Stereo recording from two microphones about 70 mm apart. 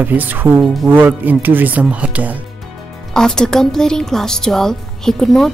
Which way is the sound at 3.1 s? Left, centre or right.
Centre.